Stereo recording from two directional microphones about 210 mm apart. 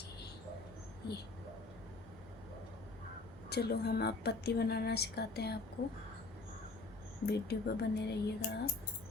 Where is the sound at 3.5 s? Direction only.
50° left (ahead or behind).